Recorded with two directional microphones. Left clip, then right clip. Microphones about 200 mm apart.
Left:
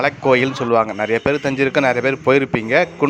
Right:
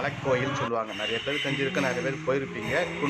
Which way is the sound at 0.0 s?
45° left (ahead or behind).